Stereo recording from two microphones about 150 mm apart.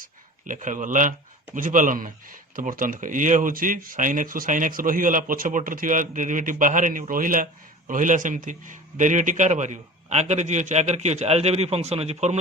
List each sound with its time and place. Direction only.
0.0 s a man's voice: 60° right (ahead or behind)